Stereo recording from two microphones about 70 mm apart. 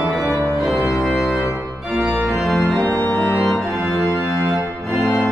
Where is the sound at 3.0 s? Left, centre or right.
Left.